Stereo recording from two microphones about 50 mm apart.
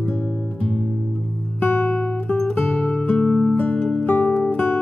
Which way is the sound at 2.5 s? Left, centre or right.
Left.